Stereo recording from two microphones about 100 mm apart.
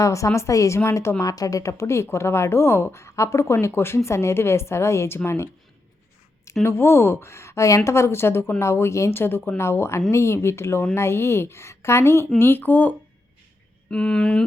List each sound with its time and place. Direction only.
0.0 s a woman's voice: 30° left (ahead or behind)
13.9 s speech: 10° left (ahead or behind)